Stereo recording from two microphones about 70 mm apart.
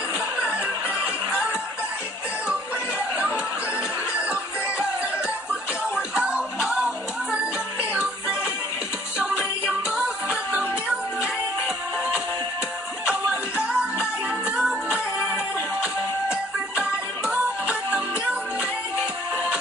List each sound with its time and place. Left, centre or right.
4.2 s music: centre
9.2 s music: centre
13.0 s music: centre
15.8 s music: centre